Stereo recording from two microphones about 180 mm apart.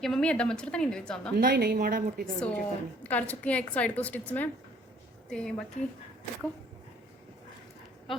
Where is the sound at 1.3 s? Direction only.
60° right (ahead or behind).